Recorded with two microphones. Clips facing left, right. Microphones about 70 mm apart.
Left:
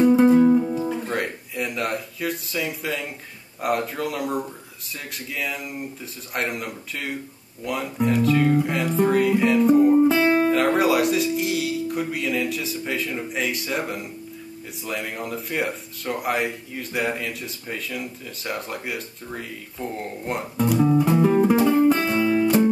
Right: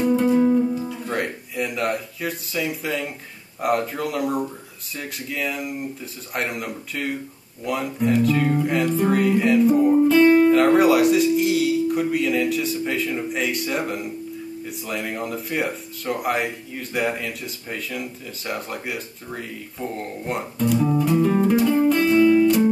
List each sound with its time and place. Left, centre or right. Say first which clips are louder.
0.0 s music: left 4 dB; centre
0.3 s music: left 2 dB; left
1.1 s a sound: right 1 dB; centre
3.6 s speech: right 2 dB; centre
9.9 s speech: right 3 dB; centre
10.5 s speech: right 4 dB; centre
20.7 s music: left 1 dB; centre